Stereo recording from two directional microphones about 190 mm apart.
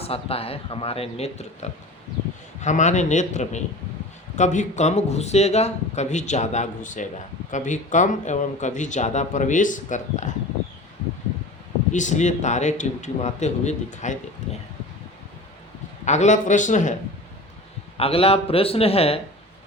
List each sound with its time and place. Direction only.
0.0 s speech: 30° left (ahead or behind)
2.6 s speech: 40° left (ahead or behind)
11.9 s speech: 40° left (ahead or behind)
16.0 s speech: 40° left (ahead or behind)
17.9 s speech: 30° left (ahead or behind)